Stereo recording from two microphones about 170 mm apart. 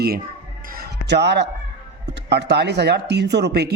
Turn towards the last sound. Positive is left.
turn(degrees=-75)  # may be behind; listen again after turning